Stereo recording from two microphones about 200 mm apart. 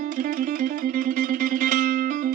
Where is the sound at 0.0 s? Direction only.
40° right (ahead or behind).